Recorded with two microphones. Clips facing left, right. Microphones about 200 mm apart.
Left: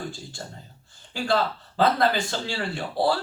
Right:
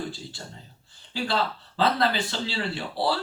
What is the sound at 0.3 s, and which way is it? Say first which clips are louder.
A man's voice: left 3 dB; 45° left (ahead or behind).